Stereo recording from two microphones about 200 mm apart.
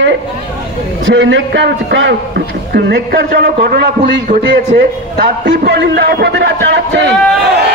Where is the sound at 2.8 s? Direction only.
55° right (ahead or behind).